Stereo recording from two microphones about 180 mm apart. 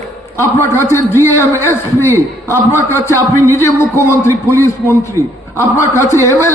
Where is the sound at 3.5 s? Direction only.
15° left (ahead or behind).